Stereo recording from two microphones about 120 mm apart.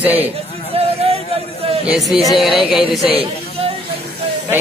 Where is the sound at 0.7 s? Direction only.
55° right (ahead or behind).